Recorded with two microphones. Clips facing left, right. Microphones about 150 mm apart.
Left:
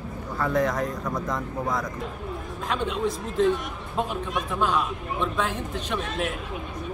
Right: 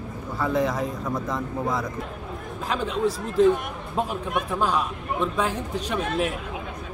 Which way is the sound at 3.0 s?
40° right (ahead or behind).